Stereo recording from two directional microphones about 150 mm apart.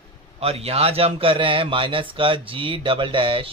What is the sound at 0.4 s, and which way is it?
A man's voice, 40° right (ahead or behind).